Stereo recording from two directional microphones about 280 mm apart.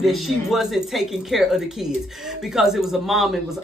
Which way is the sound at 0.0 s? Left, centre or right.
Centre.